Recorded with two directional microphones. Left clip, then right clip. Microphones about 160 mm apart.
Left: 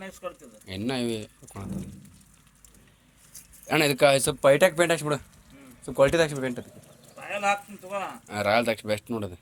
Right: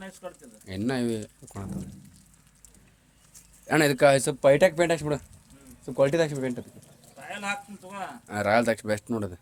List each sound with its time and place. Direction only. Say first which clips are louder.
0.0 s speech: left 3 dB; centre (ahead or behind)
0.6 s speech: right 1 dB; 35° right (ahead or behind)
3.7 s speech: even; 35° right (ahead or behind)
7.2 s speech: left 6 dB; centre (ahead or behind)
8.3 s speech: right 1 dB; 35° right (ahead or behind)